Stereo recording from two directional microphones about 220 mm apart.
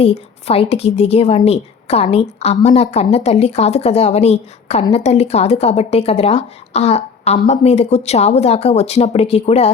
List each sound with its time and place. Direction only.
0.0 s speech: 25° left (ahead or behind)